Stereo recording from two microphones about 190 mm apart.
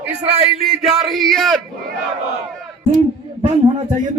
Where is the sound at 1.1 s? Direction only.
Centre (ahead or behind).